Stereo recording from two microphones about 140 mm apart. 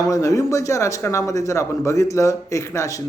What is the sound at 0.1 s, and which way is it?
A man's voice, 25° left (ahead or behind).